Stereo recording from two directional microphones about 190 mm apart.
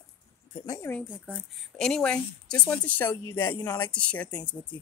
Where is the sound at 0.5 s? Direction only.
20° left (ahead or behind).